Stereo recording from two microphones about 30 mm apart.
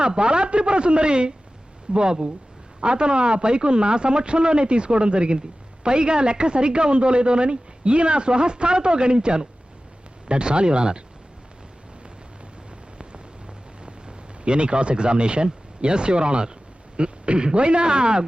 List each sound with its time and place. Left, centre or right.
0.0 s speech: right
14.4 s speech: right